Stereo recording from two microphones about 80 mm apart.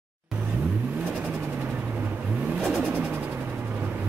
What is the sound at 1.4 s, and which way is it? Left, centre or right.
Vehicle, right.